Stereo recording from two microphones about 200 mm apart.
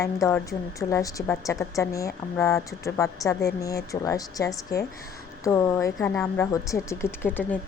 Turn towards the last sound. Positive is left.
turn(degrees=10)  # may be behind; listen again after turning